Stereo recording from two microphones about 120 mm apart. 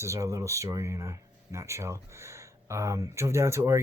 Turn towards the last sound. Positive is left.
turn(degrees=-25)  # may be behind; listen again after turning